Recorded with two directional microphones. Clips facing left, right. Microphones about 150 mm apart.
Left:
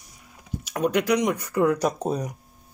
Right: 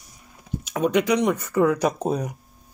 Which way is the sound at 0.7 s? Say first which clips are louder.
Right 2 dB; 10° left (ahead or behind).